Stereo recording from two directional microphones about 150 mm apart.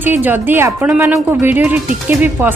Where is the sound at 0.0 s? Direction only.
15° right (ahead or behind).